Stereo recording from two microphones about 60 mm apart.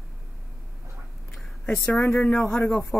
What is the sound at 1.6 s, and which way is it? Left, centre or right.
Speech, left.